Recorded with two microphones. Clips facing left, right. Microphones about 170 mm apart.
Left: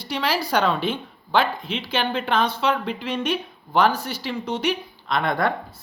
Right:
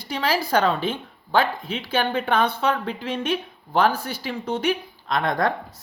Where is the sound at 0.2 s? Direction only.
45° right (ahead or behind).